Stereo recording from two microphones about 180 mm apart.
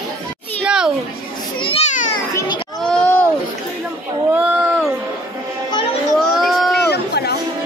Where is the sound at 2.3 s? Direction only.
25° left (ahead or behind).